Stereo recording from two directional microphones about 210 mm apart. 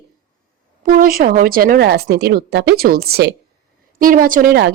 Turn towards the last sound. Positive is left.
turn(degrees=-45)  # may be behind; listen again after turning